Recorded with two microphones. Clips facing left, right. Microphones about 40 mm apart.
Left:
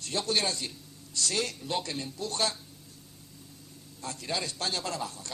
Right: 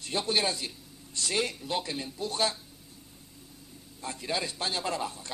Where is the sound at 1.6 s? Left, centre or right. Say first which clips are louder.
Even; centre.